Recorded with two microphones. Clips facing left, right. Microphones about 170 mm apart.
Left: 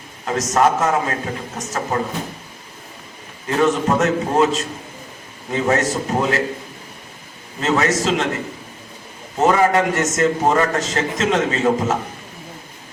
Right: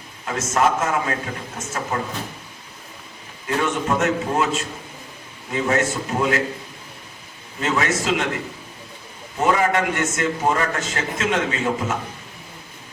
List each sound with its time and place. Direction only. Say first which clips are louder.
0.3 s a man's voice: left 3 dB; 40° left (ahead or behind)
3.6 s a man's voice: left 5 dB; 40° left (ahead or behind)
7.6 s a man's voice: left 4 dB; 40° left (ahead or behind)
9.4 s a man's voice: left 4 dB; 40° left (ahead or behind)